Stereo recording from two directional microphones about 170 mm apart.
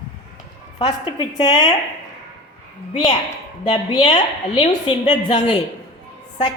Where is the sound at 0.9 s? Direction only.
25° left (ahead or behind).